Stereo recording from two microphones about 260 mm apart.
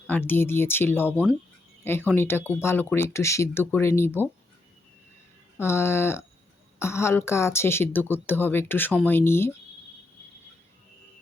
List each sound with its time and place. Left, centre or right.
0.1 s speech: centre
5.5 s speech: centre